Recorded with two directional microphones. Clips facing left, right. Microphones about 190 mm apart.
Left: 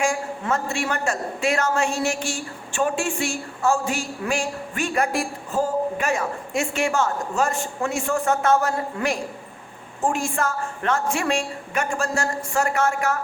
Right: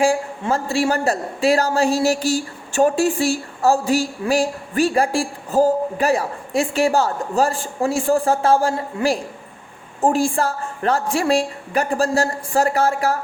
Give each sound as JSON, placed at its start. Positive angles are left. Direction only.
{"t": 0.0, "sound": "speech", "side_deg": -30}